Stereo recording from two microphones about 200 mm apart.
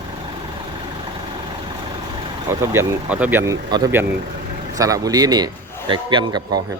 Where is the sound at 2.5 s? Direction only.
15° right (ahead or behind).